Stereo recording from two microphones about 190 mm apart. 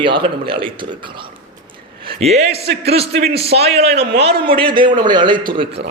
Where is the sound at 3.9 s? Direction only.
60° right (ahead or behind).